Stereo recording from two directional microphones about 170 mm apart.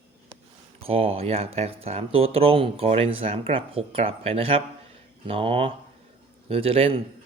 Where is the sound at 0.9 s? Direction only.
35° right (ahead or behind).